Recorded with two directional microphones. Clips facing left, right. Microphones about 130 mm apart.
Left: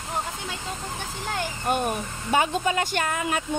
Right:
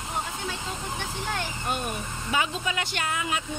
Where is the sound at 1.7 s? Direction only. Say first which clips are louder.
Left 7 dB; 45° left (ahead or behind).